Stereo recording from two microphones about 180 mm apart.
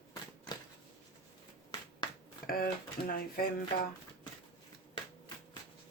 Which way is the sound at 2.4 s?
55° left (ahead or behind).